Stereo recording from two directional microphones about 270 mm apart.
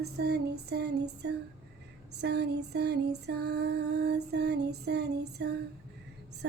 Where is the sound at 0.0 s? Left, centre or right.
Right.